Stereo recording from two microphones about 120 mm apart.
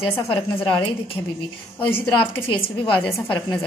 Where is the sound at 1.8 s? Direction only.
45° left (ahead or behind).